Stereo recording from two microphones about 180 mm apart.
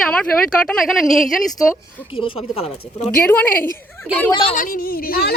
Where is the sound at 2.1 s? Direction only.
30° left (ahead or behind).